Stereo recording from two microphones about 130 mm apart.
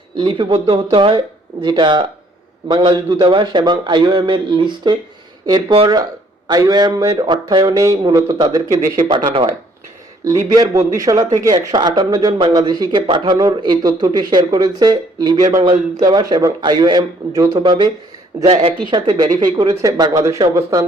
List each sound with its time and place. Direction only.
0.2 s speech: 35° right (ahead or behind)